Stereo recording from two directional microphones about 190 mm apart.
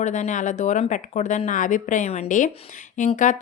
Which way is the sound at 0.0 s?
40° left (ahead or behind).